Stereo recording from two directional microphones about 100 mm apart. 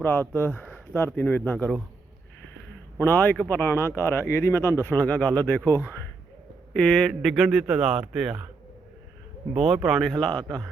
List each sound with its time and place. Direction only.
0.0 s speech: 20° left (ahead or behind)
3.0 s speech: 20° left (ahead or behind)
6.7 s speech: 5° left (ahead or behind)
9.6 s speech: 5° right (ahead or behind)